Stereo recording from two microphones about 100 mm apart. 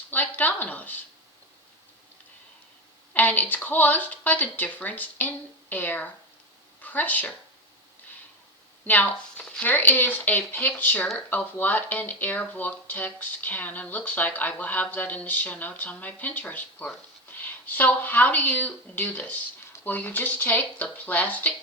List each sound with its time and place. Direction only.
0.1 s a sound: 20° left (ahead or behind)
3.1 s speech: 15° left (ahead or behind)
8.8 s speech: 15° left (ahead or behind)